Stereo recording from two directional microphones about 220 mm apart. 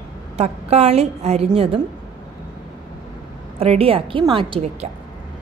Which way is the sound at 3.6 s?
25° right (ahead or behind).